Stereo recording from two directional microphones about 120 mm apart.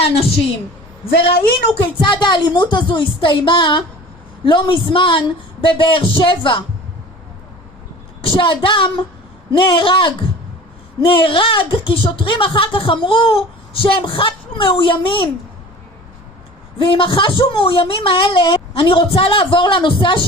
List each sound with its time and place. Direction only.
0.0 s a woman's voice: 55° left (ahead or behind)
1.8 s a woman's voice: 45° left (ahead or behind)
8.4 s a woman's voice: 45° left (ahead or behind)
16.7 s a woman's voice: 45° left (ahead or behind)